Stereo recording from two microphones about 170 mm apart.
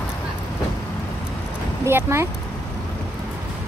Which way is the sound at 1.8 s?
15° right (ahead or behind).